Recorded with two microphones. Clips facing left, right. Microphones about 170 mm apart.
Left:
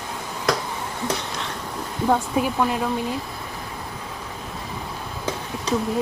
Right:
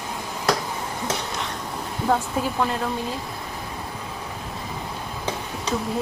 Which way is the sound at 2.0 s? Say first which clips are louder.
Left 2 dB; 5° left (ahead or behind).